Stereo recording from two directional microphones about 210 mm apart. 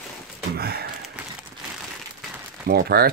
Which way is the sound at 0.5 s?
50° right (ahead or behind).